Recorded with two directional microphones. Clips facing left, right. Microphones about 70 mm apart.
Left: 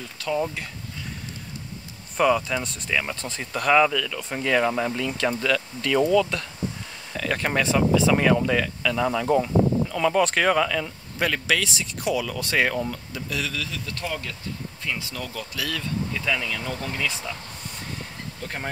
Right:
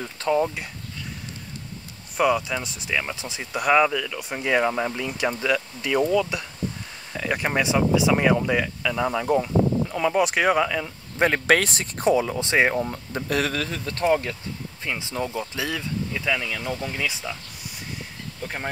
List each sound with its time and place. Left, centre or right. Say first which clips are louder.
0.3 s speech: right 4 dB; centre
2.1 s speech: left 1 dB; centre
11.1 s speech: right 5 dB; right
13.1 s speech: right 5 dB; right
16.1 s speech: right 2 dB; centre